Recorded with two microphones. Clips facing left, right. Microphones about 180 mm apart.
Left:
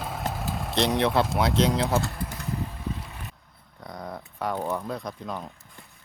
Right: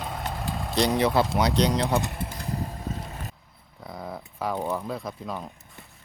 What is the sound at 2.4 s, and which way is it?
Vehicle, 35° right (ahead or behind).